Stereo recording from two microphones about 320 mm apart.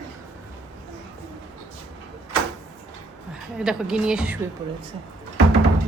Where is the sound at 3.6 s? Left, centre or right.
Centre.